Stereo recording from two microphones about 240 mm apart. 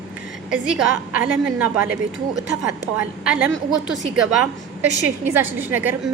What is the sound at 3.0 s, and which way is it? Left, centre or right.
A woman's voice, centre.